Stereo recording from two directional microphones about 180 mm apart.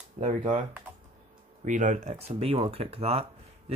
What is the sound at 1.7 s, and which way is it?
Speech, 45° right (ahead or behind).